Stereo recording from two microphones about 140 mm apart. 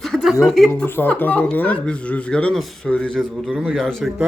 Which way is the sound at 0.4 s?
Centre (ahead or behind).